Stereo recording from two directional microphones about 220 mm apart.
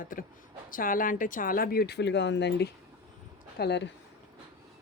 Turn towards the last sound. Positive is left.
turn(degrees=50)  # may be behind; listen again after turning